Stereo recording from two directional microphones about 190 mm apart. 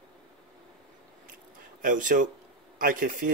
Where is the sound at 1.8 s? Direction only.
45° right (ahead or behind).